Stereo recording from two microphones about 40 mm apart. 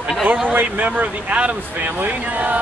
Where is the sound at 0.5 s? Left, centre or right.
Right.